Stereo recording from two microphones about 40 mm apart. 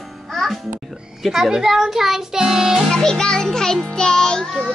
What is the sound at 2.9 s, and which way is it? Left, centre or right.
Music, centre.